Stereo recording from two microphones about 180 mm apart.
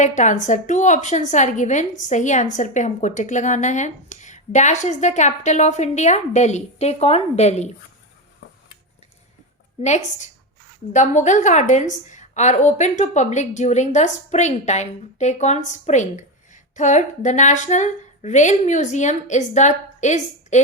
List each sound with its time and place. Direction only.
0.0 s a woman's voice: 40° left (ahead or behind)
9.8 s a woman's voice: 40° left (ahead or behind)